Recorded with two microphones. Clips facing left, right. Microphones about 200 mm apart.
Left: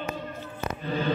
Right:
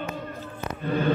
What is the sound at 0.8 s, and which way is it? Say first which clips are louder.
Speech: right 4 dB; 50° right (ahead or behind).